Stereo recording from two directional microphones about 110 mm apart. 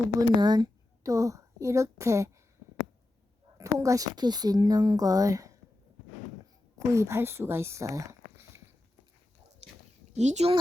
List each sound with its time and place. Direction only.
0.2 s a woman's voice: 40° right (ahead or behind)
3.6 s speech: 30° right (ahead or behind)
6.7 s speech: 25° right (ahead or behind)
10.1 s speech: 90° right